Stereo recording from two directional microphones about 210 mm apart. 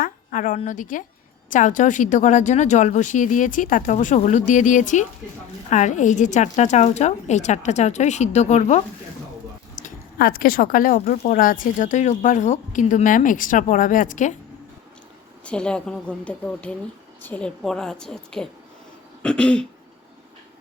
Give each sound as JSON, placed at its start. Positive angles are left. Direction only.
{"t": 0.0, "sound": "a woman's voice", "side_deg": 40}
{"t": 15.4, "sound": "a woman's voice", "side_deg": 5}